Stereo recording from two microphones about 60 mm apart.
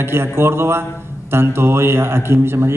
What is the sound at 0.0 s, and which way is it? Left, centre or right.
A man's voice, right.